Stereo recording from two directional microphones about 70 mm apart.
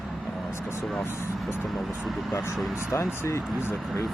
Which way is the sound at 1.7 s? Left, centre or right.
Centre.